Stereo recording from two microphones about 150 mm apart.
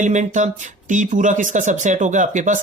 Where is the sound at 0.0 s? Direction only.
55° right (ahead or behind).